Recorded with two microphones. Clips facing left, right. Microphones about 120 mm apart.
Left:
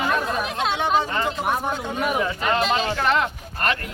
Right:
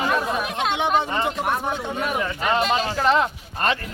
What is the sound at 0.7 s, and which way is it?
Speech, 20° right (ahead or behind).